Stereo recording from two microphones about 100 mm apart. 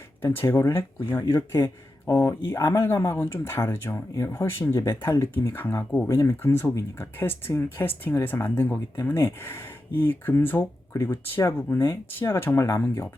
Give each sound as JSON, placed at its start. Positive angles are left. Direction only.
{"t": 0.3, "sound": "speech", "side_deg": 30}